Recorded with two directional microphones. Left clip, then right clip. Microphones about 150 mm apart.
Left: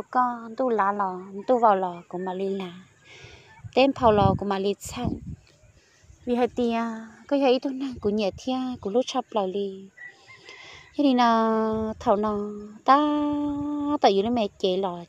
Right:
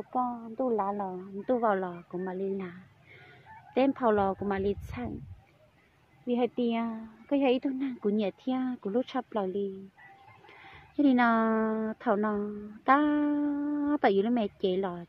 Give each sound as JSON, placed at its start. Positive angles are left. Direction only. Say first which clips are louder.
{"t": 0.3, "sound": "a woman's voice", "louder": "left 5 dB", "side_deg": 50}
{"t": 1.0, "sound": "speech", "louder": "left 7 dB", "side_deg": 15}
{"t": 3.7, "sound": "speech", "louder": "left 7 dB", "side_deg": 30}
{"t": 6.2, "sound": "a woman's voice", "louder": "left 5 dB", "side_deg": 30}
{"t": 11.0, "sound": "a woman's voice", "louder": "left 5 dB", "side_deg": 20}